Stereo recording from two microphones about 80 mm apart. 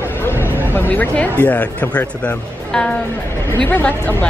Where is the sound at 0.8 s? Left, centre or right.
Centre.